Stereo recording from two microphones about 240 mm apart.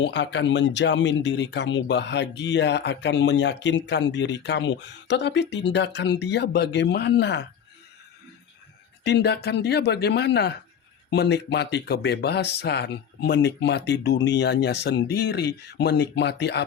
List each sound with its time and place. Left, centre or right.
0.0 s speech: left
9.0 s speech: left